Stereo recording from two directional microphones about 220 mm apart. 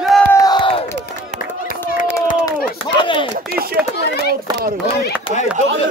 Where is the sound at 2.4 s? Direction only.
20° left (ahead or behind).